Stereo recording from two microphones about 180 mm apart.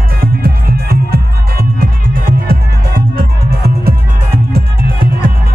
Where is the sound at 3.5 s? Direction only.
60° right (ahead or behind).